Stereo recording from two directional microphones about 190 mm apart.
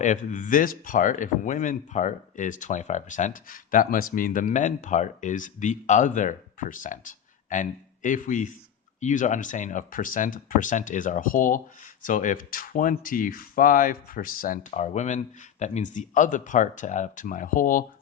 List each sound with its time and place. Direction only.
0.0 s speech: 40° left (ahead or behind)